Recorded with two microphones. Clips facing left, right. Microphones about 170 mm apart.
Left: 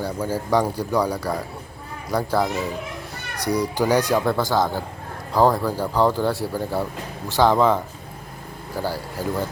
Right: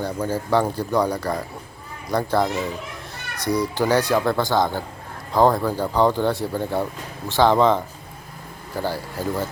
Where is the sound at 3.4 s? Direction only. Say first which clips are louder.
Even; 15° left (ahead or behind).